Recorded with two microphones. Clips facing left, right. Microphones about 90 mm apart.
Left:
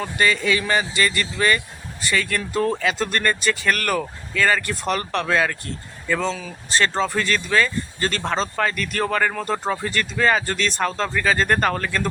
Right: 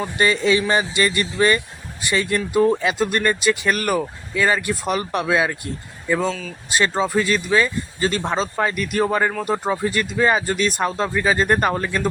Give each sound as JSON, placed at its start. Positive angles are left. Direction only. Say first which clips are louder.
{"t": 0.2, "sound": "speech", "louder": "right 3 dB", "side_deg": -25}